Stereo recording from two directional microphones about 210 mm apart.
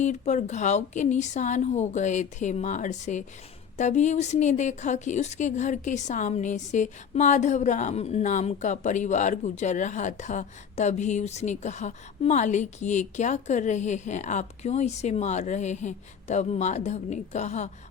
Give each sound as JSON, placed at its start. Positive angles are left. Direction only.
{"t": 0.0, "sound": "a woman's voice", "side_deg": 35}